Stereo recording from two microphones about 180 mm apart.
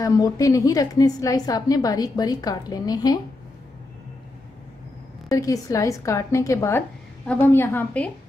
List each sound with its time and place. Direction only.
0.0 s a woman's voice: 20° left (ahead or behind)
5.3 s a woman's voice: 20° left (ahead or behind)